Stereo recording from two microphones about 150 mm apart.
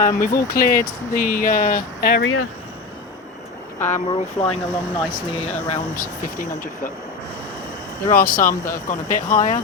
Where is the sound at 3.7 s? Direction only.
55° left (ahead or behind).